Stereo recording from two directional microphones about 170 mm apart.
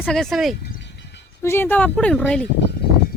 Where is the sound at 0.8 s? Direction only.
90° left.